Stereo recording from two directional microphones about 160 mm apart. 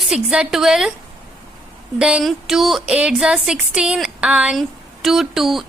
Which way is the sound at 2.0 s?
5° right (ahead or behind).